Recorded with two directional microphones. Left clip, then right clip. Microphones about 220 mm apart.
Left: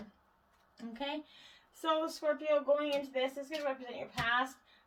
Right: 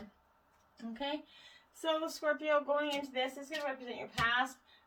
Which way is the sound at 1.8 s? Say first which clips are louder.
Left 1 dB; 20° left (ahead or behind).